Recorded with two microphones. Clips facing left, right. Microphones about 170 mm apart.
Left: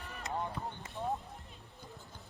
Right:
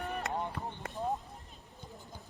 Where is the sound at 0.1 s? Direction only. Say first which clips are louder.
Right 1 dB; 60° right (ahead or behind).